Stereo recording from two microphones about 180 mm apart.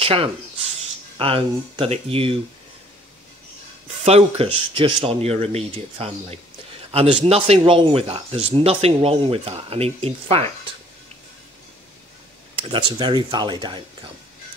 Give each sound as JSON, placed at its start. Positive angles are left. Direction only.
{"t": 0.0, "sound": "speech", "side_deg": -30}
{"t": 4.0, "sound": "speech", "side_deg": -30}
{"t": 12.6, "sound": "speech", "side_deg": -30}